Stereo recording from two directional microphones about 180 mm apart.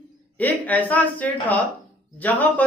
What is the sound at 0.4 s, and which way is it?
A man's voice, 10° left (ahead or behind).